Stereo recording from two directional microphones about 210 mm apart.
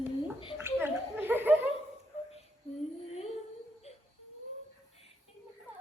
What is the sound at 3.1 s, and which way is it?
Humming, 30° left (ahead or behind).